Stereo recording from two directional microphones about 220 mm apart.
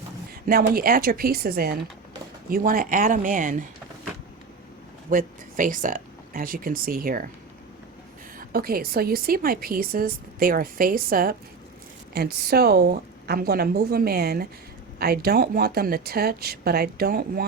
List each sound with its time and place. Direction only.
0.4 s a woman's voice: 40° right (ahead or behind)
5.0 s speech: 35° right (ahead or behind)
8.4 s a woman's voice: 40° right (ahead or behind)